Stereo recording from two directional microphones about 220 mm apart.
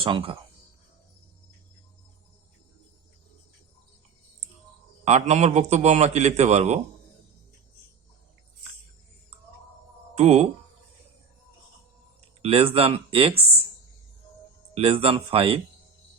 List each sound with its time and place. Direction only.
0.0 s speech: 25° right (ahead or behind)
5.0 s a man's voice: 30° right (ahead or behind)
10.2 s a man's voice: 30° right (ahead or behind)
12.4 s speech: 25° right (ahead or behind)
14.8 s speech: 25° right (ahead or behind)